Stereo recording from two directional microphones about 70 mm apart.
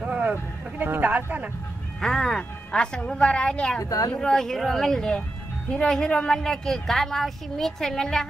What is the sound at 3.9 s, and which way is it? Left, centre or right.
Speech, left.